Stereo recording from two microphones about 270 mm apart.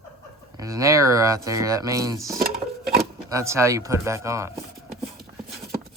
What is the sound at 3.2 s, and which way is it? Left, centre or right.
Speech, centre.